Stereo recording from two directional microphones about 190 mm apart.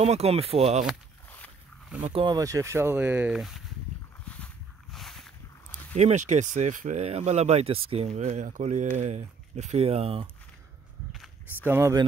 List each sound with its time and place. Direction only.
0.0 s speech: 35° right (ahead or behind)
2.0 s speech: 35° right (ahead or behind)
2.2 s speech: 20° right (ahead or behind); by 3.6 s centre (ahead or behind)
4.9 s a sound: centre (ahead or behind)
5.9 s speech: 35° right (ahead or behind)
11.6 s speech: 15° right (ahead or behind)